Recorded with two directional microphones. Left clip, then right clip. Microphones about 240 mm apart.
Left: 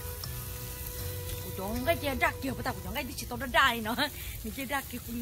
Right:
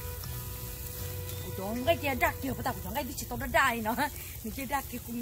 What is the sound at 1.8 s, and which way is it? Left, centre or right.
Speech, centre.